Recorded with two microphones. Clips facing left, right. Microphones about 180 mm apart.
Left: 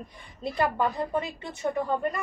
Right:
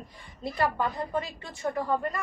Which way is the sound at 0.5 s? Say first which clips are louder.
Left 2 dB; 20° left (ahead or behind).